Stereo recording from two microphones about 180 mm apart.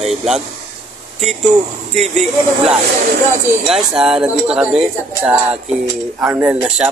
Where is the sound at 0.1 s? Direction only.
Centre (ahead or behind).